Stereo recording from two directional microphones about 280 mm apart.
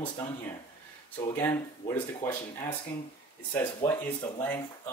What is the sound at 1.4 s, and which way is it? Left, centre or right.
Speech, centre.